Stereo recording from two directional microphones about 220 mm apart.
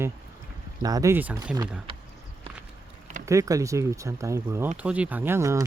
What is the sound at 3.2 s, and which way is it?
Speech, 15° right (ahead or behind).